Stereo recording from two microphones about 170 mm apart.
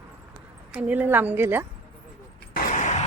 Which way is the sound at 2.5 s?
50° left (ahead or behind).